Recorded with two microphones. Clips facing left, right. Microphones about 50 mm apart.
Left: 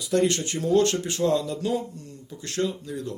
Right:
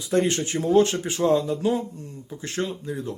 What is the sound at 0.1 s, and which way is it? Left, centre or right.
Speech, right.